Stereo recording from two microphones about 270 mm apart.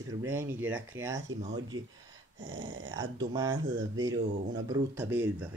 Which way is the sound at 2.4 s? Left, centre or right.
Right.